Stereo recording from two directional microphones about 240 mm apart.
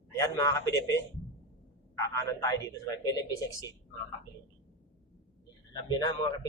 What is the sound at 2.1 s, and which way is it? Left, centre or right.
Speech, centre.